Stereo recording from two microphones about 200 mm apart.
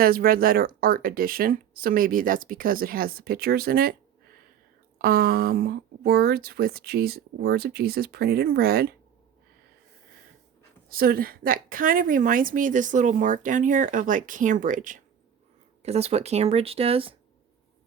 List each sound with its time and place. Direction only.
0.0 s speech: 45° right (ahead or behind)
4.9 s speech: 45° right (ahead or behind)
10.8 s a woman's voice: 45° right (ahead or behind); by 17.2 s 30° right (ahead or behind)